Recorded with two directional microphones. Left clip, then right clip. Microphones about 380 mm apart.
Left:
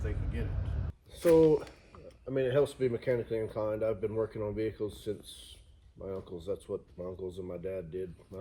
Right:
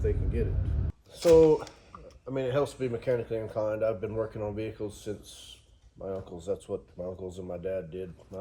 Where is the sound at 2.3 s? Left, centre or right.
Right.